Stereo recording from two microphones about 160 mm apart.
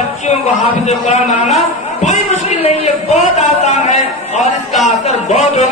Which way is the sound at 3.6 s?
45° left (ahead or behind).